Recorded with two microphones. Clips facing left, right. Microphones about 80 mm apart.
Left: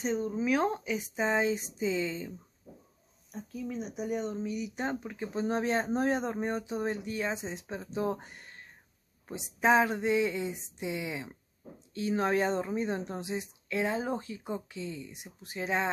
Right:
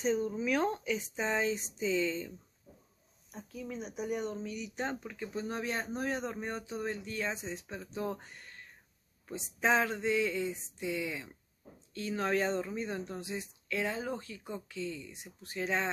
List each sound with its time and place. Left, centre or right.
0.0 s speech: centre
3.3 s speech: centre
4.3 s speech: centre